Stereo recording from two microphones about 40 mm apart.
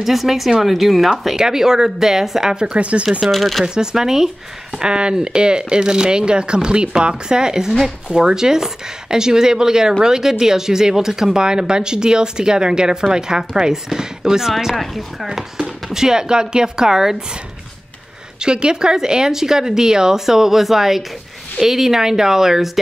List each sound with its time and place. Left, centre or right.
0.0 s speech: centre
2.5 s speech: right
3.3 s speech: centre
3.6 s speech: centre
15.9 s speech: centre
18.4 s speech: right